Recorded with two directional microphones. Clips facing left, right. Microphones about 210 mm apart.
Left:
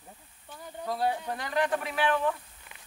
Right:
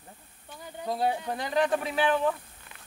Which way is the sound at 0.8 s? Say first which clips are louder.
Right 1 dB; 20° right (ahead or behind).